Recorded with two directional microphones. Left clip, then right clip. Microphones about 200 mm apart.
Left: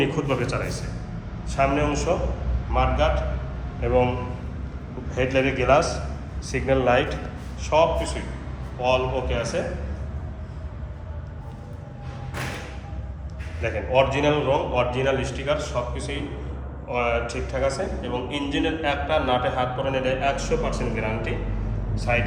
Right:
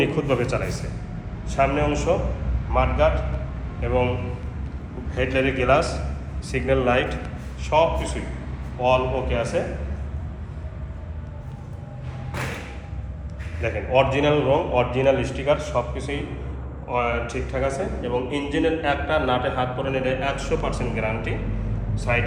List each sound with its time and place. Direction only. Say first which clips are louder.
0.0 s a man's voice: right 2 dB; 5° left (ahead or behind)
5.1 s a man's voice: even; 15° left (ahead or behind)
13.6 s a man's voice: right 1 dB; 5° left (ahead or behind)